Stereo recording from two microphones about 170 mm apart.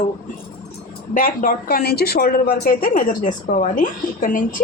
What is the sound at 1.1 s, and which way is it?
A woman's voice, 55° left (ahead or behind).